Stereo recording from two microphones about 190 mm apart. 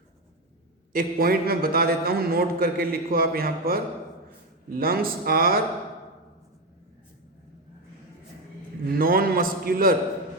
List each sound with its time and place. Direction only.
0.9 s a man's voice: 50° right (ahead or behind)
9.0 s a man's voice: 50° right (ahead or behind)